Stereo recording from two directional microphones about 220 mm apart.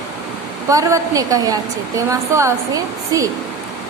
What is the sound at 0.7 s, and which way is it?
Speech, 15° right (ahead or behind).